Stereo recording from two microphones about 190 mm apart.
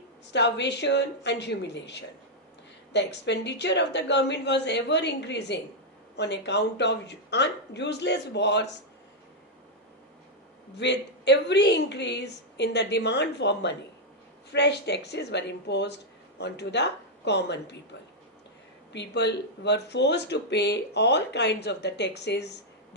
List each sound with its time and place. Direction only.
0.3 s speech: 65° left (ahead or behind)
10.8 s speech: 65° left (ahead or behind)
18.9 s speech: 65° left (ahead or behind)